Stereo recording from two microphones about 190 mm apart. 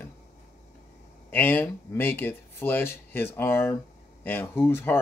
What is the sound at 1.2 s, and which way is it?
Speech, 10° left (ahead or behind).